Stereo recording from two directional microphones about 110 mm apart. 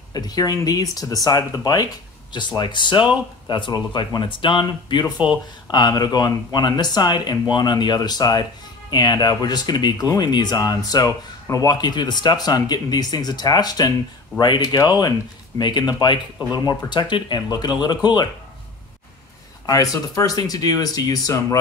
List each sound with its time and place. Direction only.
0.1 s speech: 35° left (ahead or behind)
19.6 s speech: 35° left (ahead or behind)